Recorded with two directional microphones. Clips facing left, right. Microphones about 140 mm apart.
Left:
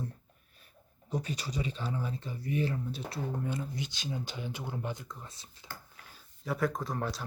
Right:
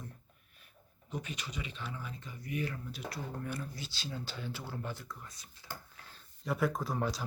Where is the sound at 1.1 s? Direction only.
35° left (ahead or behind).